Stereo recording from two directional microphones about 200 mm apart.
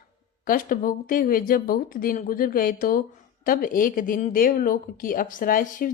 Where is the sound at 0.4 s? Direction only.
45° left (ahead or behind).